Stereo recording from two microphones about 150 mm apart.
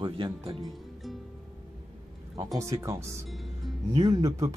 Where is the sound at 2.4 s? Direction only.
20° right (ahead or behind).